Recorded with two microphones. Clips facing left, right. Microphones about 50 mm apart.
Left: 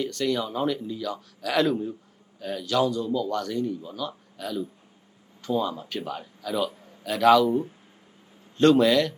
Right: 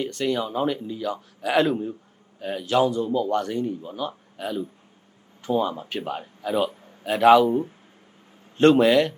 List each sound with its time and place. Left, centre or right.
0.0 s a man's voice: right